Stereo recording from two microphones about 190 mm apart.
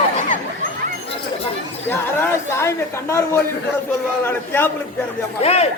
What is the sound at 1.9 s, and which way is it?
A man's voice, 15° left (ahead or behind).